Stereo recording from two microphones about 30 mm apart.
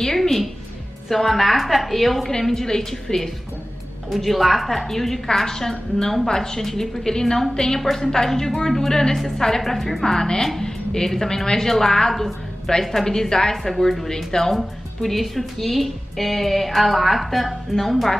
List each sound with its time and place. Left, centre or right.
0.0 s music: centre
1.0 s a woman's voice: centre
2.5 s a woman's voice: centre
4.1 s a woman's voice: centre
9.7 s a woman's voice: centre
10.0 s a woman's voice: left
10.6 s a sound: left
11.1 s a woman's voice: centre
12.1 s a woman's voice: centre
15.0 s a woman's voice: centre